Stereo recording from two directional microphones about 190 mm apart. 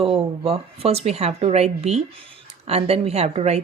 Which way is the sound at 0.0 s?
30° right (ahead or behind).